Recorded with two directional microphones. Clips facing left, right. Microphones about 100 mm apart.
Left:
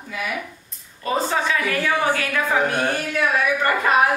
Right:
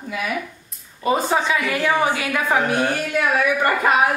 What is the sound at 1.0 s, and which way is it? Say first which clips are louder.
A woman's voice: right 3 dB; 15° right (ahead or behind).